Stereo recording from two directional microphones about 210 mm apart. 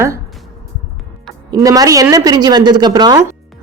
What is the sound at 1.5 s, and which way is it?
A woman's voice, 15° right (ahead or behind).